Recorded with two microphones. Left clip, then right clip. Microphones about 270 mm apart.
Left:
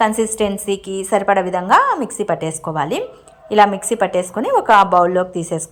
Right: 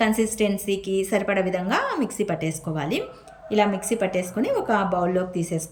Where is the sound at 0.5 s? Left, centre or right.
Left.